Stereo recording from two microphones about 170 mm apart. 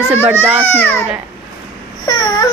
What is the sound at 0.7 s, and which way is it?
Speech, 10° left (ahead or behind).